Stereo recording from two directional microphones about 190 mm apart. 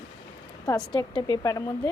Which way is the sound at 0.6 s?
20° left (ahead or behind).